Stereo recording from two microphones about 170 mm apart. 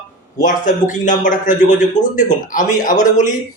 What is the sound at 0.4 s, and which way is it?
Speech, 50° left (ahead or behind).